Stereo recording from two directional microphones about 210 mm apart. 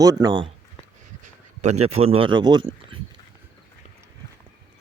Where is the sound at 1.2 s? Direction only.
35° right (ahead or behind).